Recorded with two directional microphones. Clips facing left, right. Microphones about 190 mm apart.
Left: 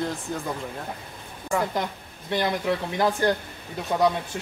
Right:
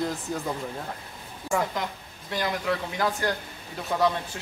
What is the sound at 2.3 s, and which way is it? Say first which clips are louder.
Speech: left 3 dB; 25° left (ahead or behind).